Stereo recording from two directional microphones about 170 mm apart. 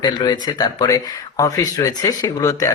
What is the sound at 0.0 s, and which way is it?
Speech, 25° left (ahead or behind).